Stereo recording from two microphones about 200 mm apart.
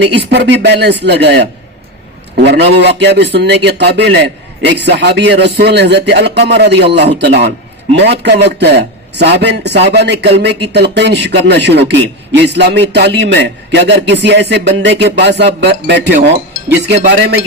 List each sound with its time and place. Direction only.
0.0 s a man's voice: 60° right (ahead or behind)